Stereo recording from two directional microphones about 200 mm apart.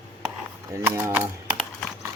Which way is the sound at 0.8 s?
10° right (ahead or behind).